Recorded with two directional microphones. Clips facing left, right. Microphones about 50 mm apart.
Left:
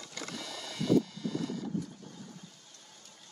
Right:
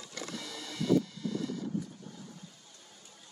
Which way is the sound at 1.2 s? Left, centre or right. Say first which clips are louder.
Even; left.